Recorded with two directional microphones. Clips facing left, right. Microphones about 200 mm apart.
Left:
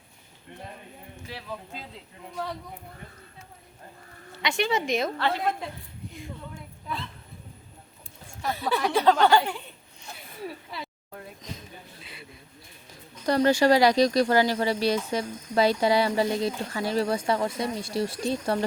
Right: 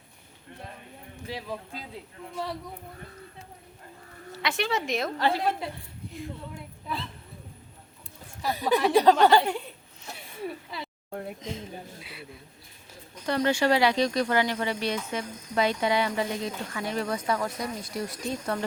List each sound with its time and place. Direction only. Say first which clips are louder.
1.3 s speech: right 3 dB; 15° right (ahead or behind)
2.3 s a woman's voice: even; 5° right (ahead or behind)
4.4 s a woman's voice: left 2 dB; centre (ahead or behind)
5.1 s a woman's voice: right 1 dB; 15° right (ahead or behind)
8.4 s speech: right 3 dB; 15° right (ahead or behind)
10.4 s a sound: right 1 dB; centre (ahead or behind)
11.1 s a sound: right 7 dB; 55° right (ahead or behind)
11.3 s speech: right 5 dB; 25° right (ahead or behind)
13.2 s speech: left 4 dB; 40° left (ahead or behind)